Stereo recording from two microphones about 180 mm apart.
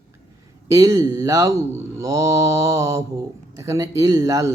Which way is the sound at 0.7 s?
20° right (ahead or behind).